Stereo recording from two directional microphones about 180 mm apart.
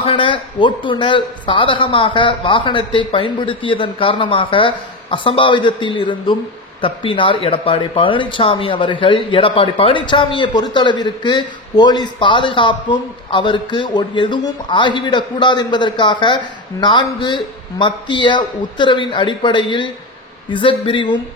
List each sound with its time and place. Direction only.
0.0 s speech: 30° left (ahead or behind)